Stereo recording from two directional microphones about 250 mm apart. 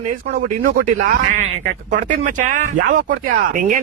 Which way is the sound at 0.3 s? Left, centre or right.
Right.